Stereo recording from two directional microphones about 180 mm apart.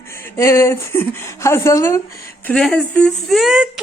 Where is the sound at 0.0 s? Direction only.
15° left (ahead or behind).